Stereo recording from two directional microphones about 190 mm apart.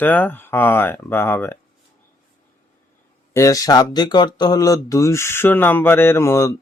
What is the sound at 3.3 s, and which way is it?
Speech, 15° left (ahead or behind).